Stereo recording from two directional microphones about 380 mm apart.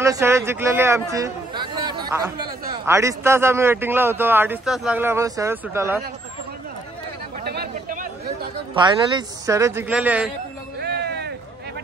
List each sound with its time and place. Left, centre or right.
0.0 s a man's voice: centre
7.4 s chatter: right
8.7 s a man's voice: centre
10.8 s a sound: right